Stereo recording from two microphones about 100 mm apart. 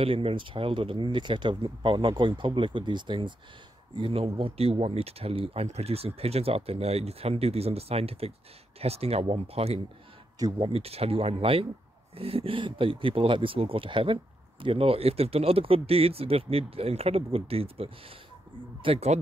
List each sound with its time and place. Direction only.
0.0 s speech: 70° right (ahead or behind); by 3.3 s 50° right (ahead or behind)
4.0 s speech: 70° right (ahead or behind)